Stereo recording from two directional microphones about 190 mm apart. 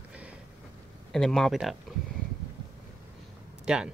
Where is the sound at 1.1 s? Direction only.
Centre (ahead or behind).